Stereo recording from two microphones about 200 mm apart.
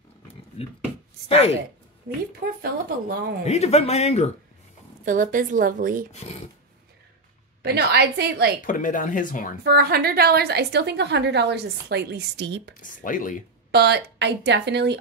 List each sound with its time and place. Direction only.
0.6 s speech: 30° left (ahead or behind)
2.1 s a woman's voice: 50° right (ahead or behind)
3.4 s speech: 30° left (ahead or behind)
5.0 s a woman's voice: 45° right (ahead or behind)
7.6 s a woman's voice: 55° right (ahead or behind)
8.5 s speech: 40° left (ahead or behind)
9.6 s a woman's voice: 50° right (ahead or behind)
12.8 s speech: 40° left (ahead or behind)
13.7 s a woman's voice: 55° right (ahead or behind)